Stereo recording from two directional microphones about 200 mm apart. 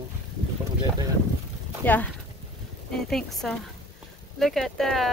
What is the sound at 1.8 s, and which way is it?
Speech, 10° left (ahead or behind).